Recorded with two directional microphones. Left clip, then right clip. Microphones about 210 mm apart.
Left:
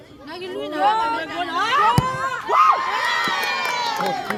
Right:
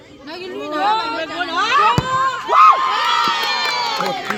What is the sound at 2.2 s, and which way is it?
Crowd, 50° right (ahead or behind).